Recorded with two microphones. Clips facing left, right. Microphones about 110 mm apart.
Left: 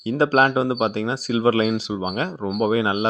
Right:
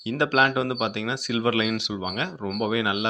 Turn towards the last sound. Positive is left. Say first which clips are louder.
# left 5 dB
turn(degrees=35)  # may be behind; listen again after turning